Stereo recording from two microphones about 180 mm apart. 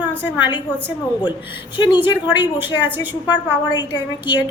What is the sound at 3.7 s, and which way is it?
Speech, 25° left (ahead or behind).